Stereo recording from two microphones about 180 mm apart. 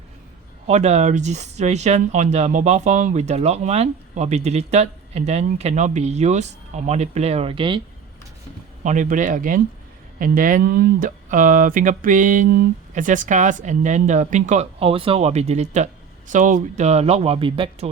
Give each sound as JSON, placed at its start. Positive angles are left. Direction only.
{"t": 0.7, "sound": "speech", "side_deg": -40}
{"t": 8.8, "sound": "speech", "side_deg": -45}